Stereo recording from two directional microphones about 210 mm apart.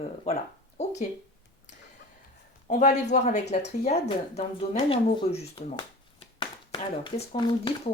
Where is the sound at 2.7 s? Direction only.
35° left (ahead or behind).